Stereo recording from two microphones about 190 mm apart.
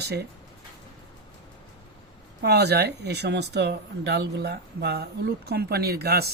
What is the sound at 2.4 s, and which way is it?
Speech, 60° right (ahead or behind).